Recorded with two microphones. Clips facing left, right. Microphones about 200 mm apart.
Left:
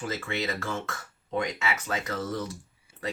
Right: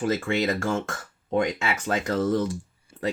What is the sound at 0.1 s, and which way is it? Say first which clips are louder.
Speech: right 6 dB; 50° right (ahead or behind).